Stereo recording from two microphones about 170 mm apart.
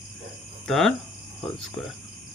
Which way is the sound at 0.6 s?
Centre (ahead or behind).